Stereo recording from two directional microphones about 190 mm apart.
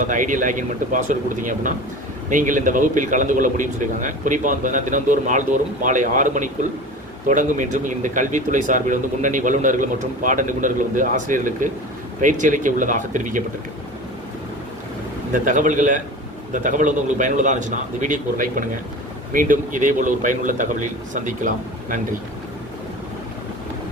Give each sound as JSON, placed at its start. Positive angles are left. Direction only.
{"t": 0.0, "sound": "a man's voice", "side_deg": -45}
{"t": 15.3, "sound": "speech", "side_deg": -40}